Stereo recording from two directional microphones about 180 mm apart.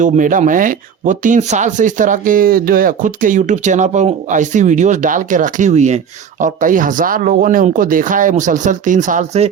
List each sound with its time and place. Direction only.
0.0 s speech: 45° right (ahead or behind)